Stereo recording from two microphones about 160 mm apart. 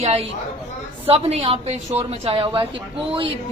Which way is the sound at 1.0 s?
35° right (ahead or behind).